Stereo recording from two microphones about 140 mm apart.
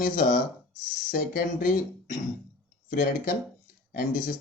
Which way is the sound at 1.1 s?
85° left.